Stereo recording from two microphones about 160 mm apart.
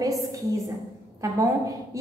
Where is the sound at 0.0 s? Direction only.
20° right (ahead or behind).